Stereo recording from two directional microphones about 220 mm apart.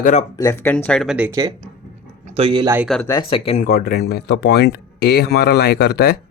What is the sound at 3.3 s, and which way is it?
Speech, 25° left (ahead or behind).